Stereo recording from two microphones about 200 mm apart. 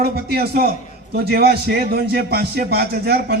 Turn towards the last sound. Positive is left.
turn(degrees=-50)  # may be behind; listen again after turning